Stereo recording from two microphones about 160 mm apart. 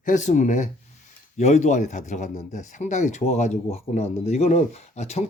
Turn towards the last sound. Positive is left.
turn(degrees=40)  # may be behind; listen again after turning